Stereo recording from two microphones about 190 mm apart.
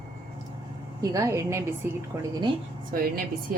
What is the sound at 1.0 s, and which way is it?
A woman's voice, 15° right (ahead or behind).